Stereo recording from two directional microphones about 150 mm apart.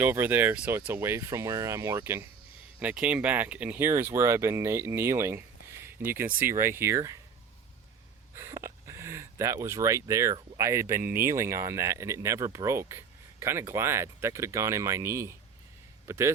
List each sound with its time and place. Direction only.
0.0 s speech: 15° right (ahead or behind)
8.4 s a sound: 20° right (ahead or behind)
10.6 s speech: 20° right (ahead or behind)